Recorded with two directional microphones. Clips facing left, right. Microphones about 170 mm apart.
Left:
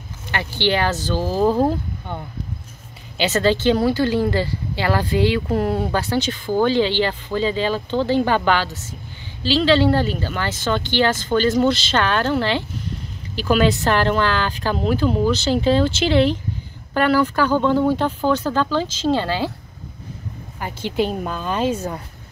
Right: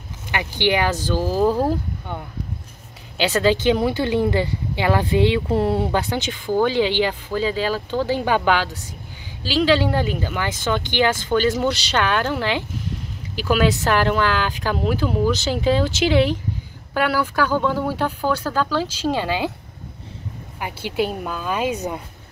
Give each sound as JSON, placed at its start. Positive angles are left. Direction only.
{"t": 0.3, "sound": "speech", "side_deg": -15}
{"t": 1.2, "sound": "speech", "side_deg": 15}
{"t": 3.3, "sound": "speech", "side_deg": -10}
{"t": 20.5, "sound": "speech", "side_deg": -10}